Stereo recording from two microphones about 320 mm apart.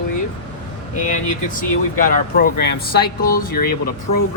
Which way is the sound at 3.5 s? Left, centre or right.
Left.